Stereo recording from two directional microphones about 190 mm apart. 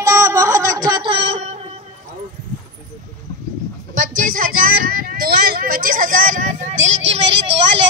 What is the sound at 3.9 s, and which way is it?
Speech, 45° right (ahead or behind).